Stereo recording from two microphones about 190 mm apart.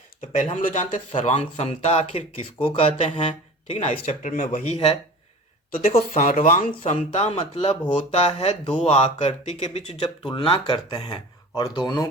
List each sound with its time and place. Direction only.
0.3 s speech: 40° left (ahead or behind); by 12.0 s 20° left (ahead or behind)